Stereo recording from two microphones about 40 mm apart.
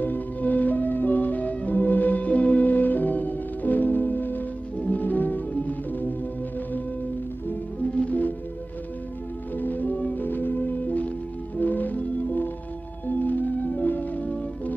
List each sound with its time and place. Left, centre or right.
0.0 s music: left
4.7 s music: left
5.0 s music: left
7.9 s music: left
9.6 s music: left
10.2 s music: left